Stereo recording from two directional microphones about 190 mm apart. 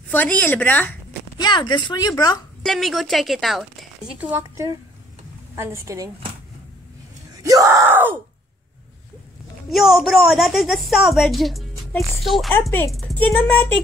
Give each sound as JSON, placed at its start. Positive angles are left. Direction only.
{"t": 0.1, "sound": "speech", "side_deg": 10}
{"t": 1.4, "sound": "speech", "side_deg": 25}
{"t": 2.6, "sound": "a woman's voice", "side_deg": 0}
{"t": 7.4, "sound": "yell", "side_deg": -15}
{"t": 9.7, "sound": "a woman's voice", "side_deg": 0}